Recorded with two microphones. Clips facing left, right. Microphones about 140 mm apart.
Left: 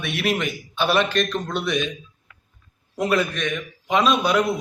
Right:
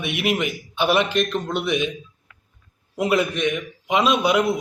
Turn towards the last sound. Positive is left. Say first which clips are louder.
# right 1 dB
turn(degrees=-20)  # may be behind; listen again after turning